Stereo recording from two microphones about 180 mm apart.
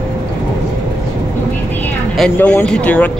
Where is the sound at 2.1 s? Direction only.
5° left (ahead or behind).